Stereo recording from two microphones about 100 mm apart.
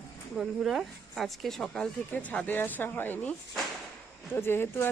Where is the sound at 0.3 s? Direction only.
5° right (ahead or behind).